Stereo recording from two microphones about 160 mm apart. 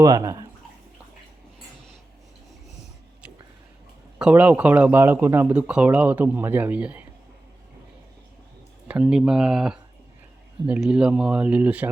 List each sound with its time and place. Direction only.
0.0 s speech: 20° right (ahead or behind)
4.2 s speech: 10° right (ahead or behind)
8.9 s speech: 5° right (ahead or behind)